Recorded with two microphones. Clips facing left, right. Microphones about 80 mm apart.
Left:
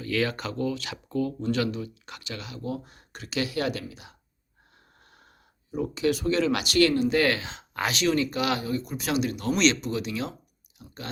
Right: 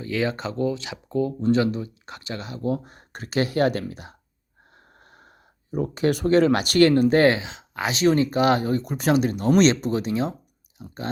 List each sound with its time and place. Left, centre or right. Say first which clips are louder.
0.0 s speech: right 2 dB; right
5.7 s speech: right 3 dB; right
7.4 s speech: right 1 dB; centre
7.9 s speech: right 5 dB; right